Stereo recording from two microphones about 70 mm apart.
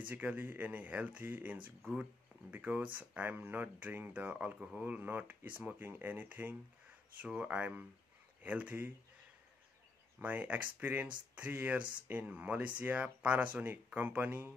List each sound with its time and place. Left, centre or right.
0.0 s speech: right
10.2 s speech: right